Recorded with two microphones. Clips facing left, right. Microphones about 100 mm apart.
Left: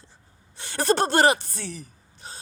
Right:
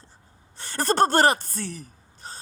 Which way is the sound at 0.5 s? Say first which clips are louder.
Left 2 dB; 45° right (ahead or behind).